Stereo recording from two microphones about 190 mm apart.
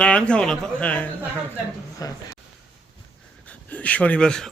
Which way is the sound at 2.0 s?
20° left (ahead or behind).